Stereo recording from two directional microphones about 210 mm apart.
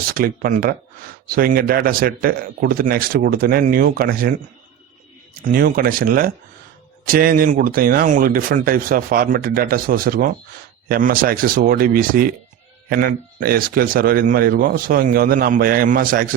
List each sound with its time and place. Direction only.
0.1 s speech: 40° right (ahead or behind)
5.5 s speech: 40° right (ahead or behind)